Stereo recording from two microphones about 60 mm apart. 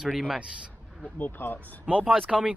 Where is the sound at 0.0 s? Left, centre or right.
Centre.